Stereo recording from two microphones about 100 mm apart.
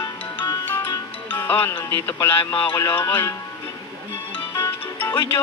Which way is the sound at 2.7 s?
25° left (ahead or behind).